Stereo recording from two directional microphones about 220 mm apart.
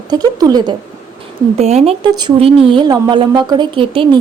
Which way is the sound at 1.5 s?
30° right (ahead or behind).